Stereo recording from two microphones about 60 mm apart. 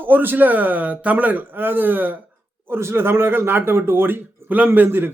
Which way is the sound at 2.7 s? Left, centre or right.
Right.